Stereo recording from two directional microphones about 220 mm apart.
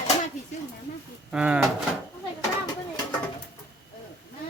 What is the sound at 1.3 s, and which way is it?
Speech, 5° right (ahead or behind).